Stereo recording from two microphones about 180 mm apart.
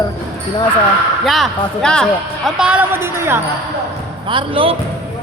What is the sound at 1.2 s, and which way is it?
A man's voice, centre (ahead or behind).